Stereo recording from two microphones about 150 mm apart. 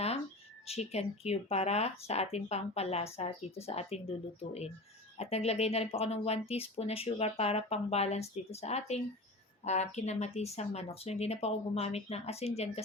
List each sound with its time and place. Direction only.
0.7 s speech: 45° left (ahead or behind)